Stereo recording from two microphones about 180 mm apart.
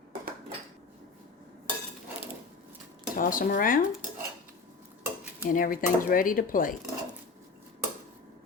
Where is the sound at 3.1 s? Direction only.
50° left (ahead or behind).